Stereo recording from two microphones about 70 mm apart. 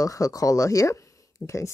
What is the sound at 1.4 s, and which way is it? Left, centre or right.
Speech, left.